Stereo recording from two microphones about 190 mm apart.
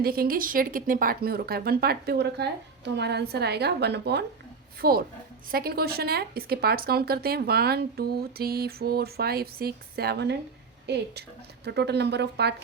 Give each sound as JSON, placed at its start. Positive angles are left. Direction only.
{"t": 0.0, "sound": "speech", "side_deg": -50}